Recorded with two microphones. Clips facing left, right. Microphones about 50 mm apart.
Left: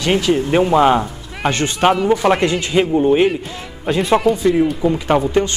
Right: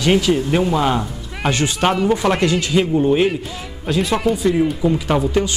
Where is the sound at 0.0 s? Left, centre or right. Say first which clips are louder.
Right 1 dB; centre.